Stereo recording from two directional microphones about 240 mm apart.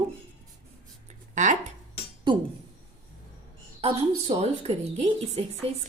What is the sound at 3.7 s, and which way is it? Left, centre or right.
Speech, right.